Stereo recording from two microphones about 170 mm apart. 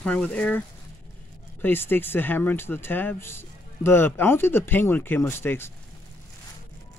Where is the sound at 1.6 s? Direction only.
10° left (ahead or behind).